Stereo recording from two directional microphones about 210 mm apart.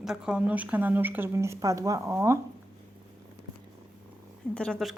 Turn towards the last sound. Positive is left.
turn(degrees=0)  # may be behind; listen again after turning